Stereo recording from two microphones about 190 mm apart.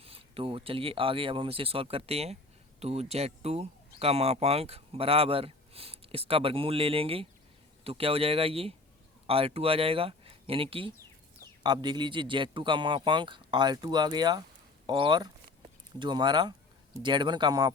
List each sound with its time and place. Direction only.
0.0 s speech: 30° right (ahead or behind)